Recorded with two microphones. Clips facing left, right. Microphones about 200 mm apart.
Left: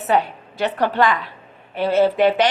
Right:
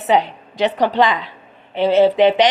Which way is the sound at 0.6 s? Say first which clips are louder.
Right 3 dB; 20° right (ahead or behind).